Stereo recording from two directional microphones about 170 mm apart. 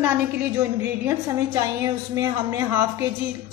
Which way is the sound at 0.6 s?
20° right (ahead or behind).